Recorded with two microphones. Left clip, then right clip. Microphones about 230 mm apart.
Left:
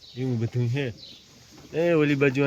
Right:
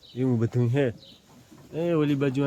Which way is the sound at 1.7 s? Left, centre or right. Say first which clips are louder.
Left 3 dB; centre.